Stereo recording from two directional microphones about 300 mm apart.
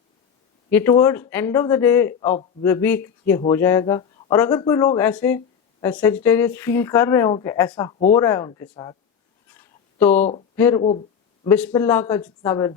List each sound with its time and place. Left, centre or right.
0.7 s speech: centre
2.3 s a man's voice: centre
2.6 s speech: centre
9.5 s a sound: centre
10.2 s a man's voice: left
10.5 s speech: centre